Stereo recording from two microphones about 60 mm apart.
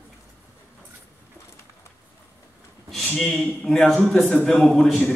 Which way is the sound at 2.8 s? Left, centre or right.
Centre.